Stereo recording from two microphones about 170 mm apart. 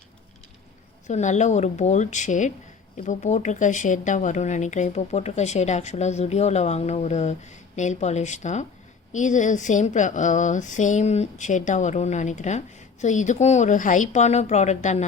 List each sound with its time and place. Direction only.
1.0 s a woman's voice: 45° left (ahead or behind)